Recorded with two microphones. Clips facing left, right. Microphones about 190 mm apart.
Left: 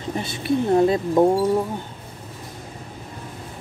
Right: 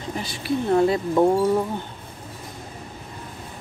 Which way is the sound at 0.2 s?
25° left (ahead or behind).